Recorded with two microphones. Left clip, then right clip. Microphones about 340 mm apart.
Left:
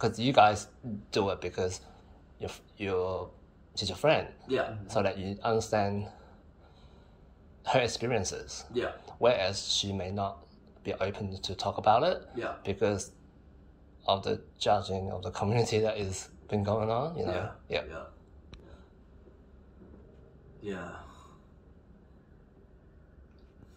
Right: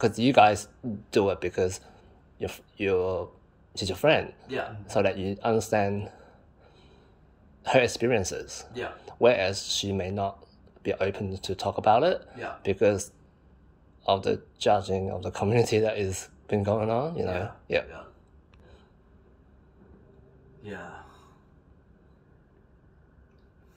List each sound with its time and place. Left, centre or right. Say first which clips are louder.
0.0 s speech: right 4 dB; right
7.6 s speech: right 5 dB; right
14.0 s speech: right 4 dB; right